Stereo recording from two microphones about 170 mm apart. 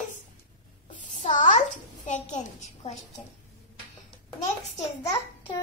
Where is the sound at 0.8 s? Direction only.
45° left (ahead or behind).